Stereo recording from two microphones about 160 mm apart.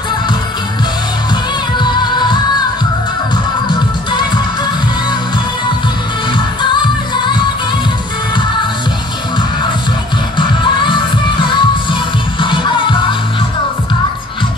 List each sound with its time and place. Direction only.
1.8 s music: 30° left (ahead or behind)
3.6 s music: 30° left (ahead or behind)
10.3 s music: 30° left (ahead or behind)